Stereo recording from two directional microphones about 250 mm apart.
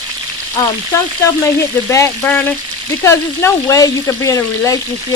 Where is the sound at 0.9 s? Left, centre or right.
Centre.